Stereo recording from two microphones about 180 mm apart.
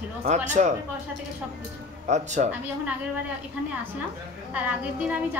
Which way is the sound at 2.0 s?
40° right (ahead or behind).